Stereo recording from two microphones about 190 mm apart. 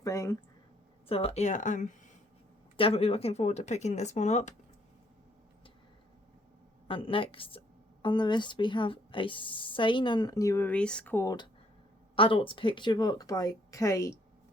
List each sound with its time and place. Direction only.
0.0 s speech: 15° left (ahead or behind)
1.0 s speech: 30° left (ahead or behind)
2.7 s speech: 30° left (ahead or behind)
6.8 s a woman's voice: 25° left (ahead or behind)
12.1 s a woman's voice: 30° left (ahead or behind)